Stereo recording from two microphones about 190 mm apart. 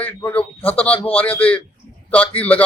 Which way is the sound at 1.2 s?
10° left (ahead or behind).